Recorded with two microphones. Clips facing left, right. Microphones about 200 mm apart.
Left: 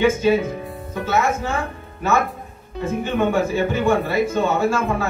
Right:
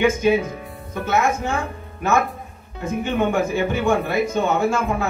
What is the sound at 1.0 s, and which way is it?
Speech, 15° right (ahead or behind).